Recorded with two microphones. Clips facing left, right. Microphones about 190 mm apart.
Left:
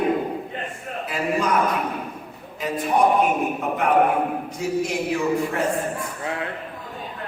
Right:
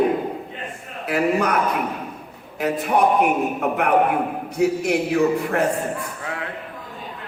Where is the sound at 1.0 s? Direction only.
65° right (ahead or behind).